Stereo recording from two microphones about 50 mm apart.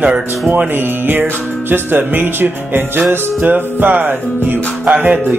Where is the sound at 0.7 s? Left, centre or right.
Right.